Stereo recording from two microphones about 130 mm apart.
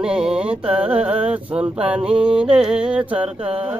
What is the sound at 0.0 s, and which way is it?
Carnatic music, 5° right (ahead or behind).